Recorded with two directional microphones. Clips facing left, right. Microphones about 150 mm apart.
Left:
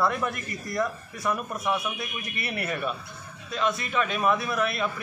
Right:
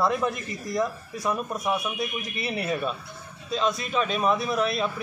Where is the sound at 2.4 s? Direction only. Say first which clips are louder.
Right 2 dB; 25° right (ahead or behind).